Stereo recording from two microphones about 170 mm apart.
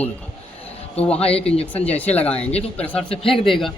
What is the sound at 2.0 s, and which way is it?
A man's voice, 10° left (ahead or behind).